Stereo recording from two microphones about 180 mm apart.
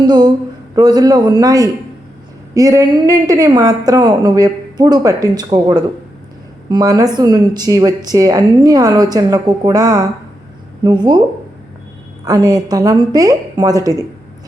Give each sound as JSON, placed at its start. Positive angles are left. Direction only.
{"t": 0.0, "sound": "a woman's voice", "side_deg": -25}
{"t": 12.2, "sound": "a woman's voice", "side_deg": -20}